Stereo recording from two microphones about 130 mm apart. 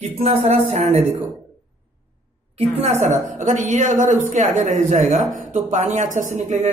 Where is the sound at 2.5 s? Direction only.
60° right (ahead or behind).